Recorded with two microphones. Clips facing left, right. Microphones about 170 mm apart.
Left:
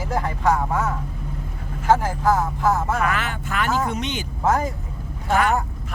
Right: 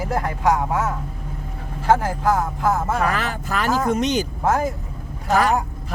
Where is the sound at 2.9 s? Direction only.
35° right (ahead or behind).